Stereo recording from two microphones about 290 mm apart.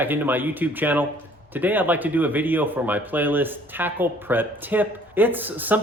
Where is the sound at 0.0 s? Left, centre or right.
Centre.